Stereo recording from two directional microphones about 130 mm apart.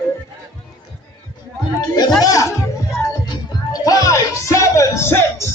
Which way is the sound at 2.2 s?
25° left (ahead or behind).